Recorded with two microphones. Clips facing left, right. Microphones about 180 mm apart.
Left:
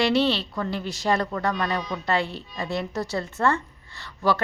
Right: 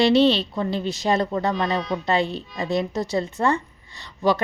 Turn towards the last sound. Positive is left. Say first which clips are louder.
# right 3 dB
turn(degrees=-20)  # may be behind; listen again after turning